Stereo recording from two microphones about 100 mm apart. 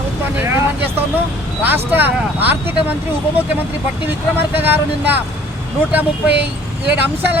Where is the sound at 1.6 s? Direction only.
20° right (ahead or behind).